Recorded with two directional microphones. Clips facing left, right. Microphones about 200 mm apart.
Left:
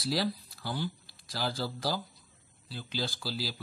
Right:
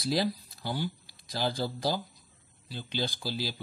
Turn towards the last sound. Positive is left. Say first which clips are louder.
# right 2 dB
turn(degrees=-20)  # may be behind; listen again after turning